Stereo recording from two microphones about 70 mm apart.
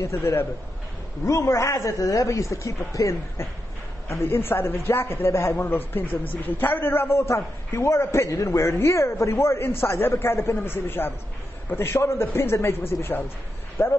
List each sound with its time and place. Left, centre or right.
0.0 s a man's voice: left
1.2 s a man's voice: left
4.1 s a man's voice: left